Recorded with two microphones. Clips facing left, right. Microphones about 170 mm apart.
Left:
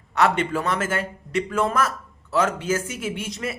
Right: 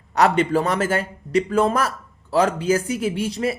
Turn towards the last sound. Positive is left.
turn(degrees=-35)  # may be behind; listen again after turning